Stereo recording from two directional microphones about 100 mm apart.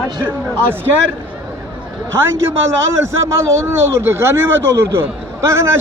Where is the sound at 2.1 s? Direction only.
25° right (ahead or behind).